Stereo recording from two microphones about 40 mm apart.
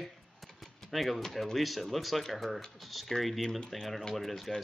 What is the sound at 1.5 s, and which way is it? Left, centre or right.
Speech, centre.